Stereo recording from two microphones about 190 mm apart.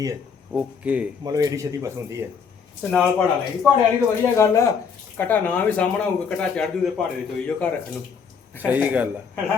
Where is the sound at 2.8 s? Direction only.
5° left (ahead or behind).